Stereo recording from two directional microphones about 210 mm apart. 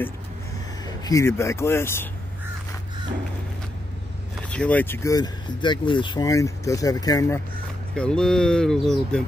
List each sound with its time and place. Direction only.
0.8 s speech: 15° left (ahead or behind)
4.5 s speech: 5° left (ahead or behind)
7.9 s speech: 5° left (ahead or behind)